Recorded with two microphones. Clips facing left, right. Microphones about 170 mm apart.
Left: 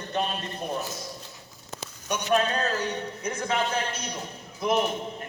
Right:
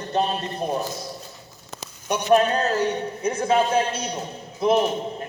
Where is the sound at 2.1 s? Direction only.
30° right (ahead or behind).